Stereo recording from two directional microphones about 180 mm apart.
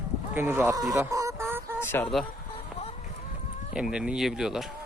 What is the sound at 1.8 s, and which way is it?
Speech, 15° left (ahead or behind).